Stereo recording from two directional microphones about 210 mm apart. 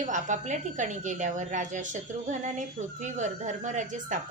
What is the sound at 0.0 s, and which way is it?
A woman's voice, 35° right (ahead or behind).